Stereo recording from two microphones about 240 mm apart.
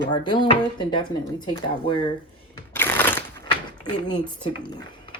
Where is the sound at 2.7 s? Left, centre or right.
Centre.